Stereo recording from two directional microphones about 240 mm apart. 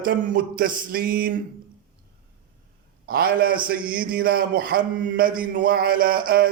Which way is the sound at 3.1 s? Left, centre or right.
Right.